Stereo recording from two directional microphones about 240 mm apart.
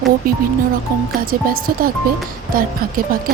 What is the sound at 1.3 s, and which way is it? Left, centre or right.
Speech, right.